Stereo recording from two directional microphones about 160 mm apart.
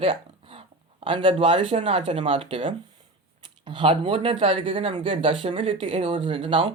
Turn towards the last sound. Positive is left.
turn(degrees=-30)  # may be behind; listen again after turning